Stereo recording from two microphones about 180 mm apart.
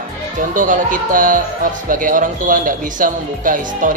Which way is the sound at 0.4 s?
45° right (ahead or behind).